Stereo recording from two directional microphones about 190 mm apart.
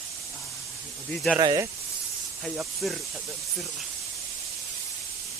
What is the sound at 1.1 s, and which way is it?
Speech, 5° left (ahead or behind).